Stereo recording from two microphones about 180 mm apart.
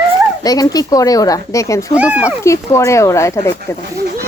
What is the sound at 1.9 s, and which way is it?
Speech, 10° right (ahead or behind).